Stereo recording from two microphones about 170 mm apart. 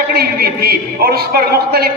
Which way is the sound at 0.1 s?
65° right (ahead or behind).